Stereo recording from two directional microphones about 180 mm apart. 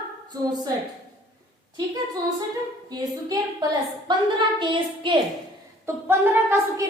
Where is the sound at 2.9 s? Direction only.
20° right (ahead or behind).